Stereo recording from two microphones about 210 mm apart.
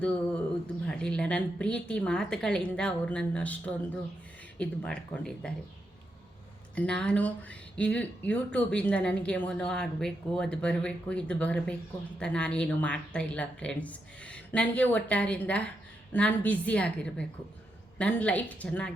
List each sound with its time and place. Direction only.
0.9 s speech: 5° left (ahead or behind)
6.7 s a woman's voice: 5° left (ahead or behind)